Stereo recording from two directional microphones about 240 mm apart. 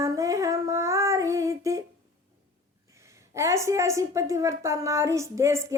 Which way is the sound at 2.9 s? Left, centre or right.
Centre.